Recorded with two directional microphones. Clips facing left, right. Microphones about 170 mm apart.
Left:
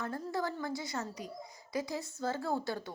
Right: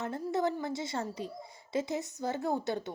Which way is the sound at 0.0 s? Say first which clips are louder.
Right 4 dB; 20° right (ahead or behind).